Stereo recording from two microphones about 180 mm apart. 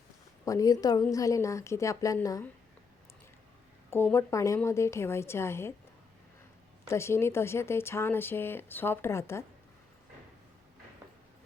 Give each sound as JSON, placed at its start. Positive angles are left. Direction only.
{"t": 0.4, "sound": "speech", "side_deg": 20}
{"t": 3.8, "sound": "speech", "side_deg": 15}
{"t": 6.8, "sound": "speech", "side_deg": 15}